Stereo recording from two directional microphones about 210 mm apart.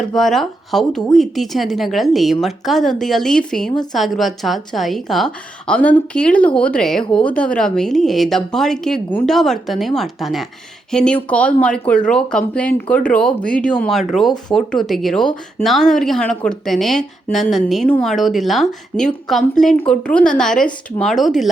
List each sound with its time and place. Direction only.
0.1 s a woman's voice: centre (ahead or behind)